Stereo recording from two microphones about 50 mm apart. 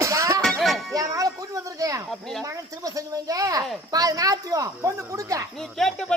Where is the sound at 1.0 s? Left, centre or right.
Right.